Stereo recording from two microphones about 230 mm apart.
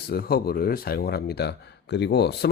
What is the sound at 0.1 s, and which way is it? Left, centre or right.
Speech, left.